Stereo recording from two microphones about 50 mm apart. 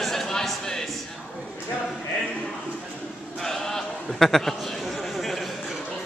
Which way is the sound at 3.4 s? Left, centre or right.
Centre.